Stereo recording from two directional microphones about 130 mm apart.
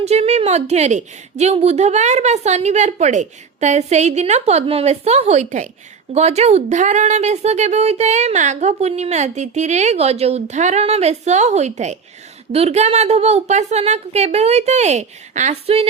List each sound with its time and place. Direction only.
0.0 s speech: 55° right (ahead or behind)